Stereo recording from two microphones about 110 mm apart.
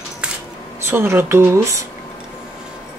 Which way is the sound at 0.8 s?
20° right (ahead or behind).